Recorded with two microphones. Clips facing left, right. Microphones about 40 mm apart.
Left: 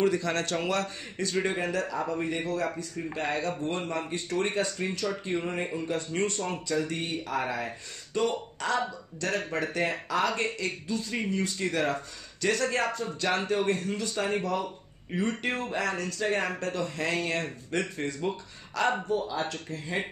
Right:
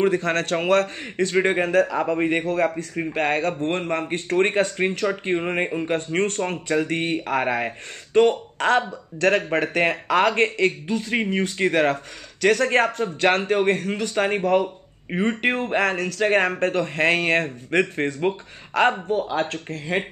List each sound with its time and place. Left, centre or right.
0.0 s a man's voice: right